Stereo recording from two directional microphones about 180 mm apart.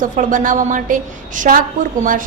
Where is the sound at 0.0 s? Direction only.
45° right (ahead or behind).